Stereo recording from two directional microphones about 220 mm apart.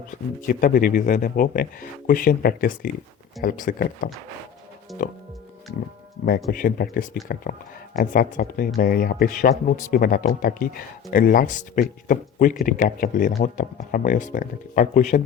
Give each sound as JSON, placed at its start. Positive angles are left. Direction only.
{"t": 0.4, "sound": "speech", "side_deg": 40}
{"t": 6.2, "sound": "speech", "side_deg": 40}